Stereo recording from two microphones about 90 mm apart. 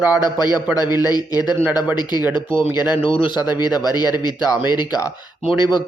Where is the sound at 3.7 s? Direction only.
45° left (ahead or behind).